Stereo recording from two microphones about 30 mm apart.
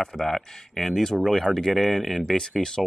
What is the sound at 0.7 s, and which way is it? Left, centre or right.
Speech, centre.